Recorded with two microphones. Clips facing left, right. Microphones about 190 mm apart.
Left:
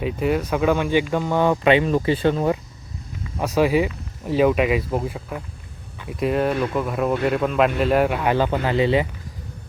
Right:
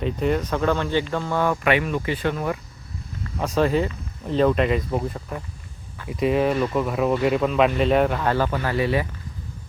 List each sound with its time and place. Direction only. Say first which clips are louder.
0.0 s speech: left 1 dB; 5° left (ahead or behind); by 2.6 s 25° left (ahead or behind)
3.2 s speech: left 2 dB; 10° left (ahead or behind)